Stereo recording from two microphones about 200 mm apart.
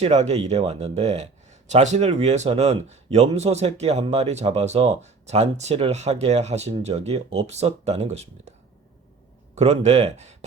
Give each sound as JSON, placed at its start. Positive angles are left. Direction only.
{"t": 0.0, "sound": "speech", "side_deg": -35}
{"t": 9.6, "sound": "speech", "side_deg": -30}